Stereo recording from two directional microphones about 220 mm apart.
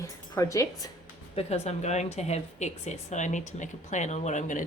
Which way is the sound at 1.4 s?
30° left (ahead or behind).